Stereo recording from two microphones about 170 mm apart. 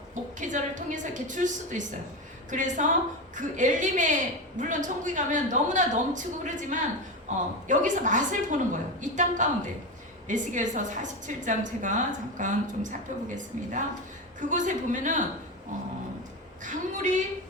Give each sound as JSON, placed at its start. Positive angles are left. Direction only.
{"t": 0.1, "sound": "a woman's voice", "side_deg": -50}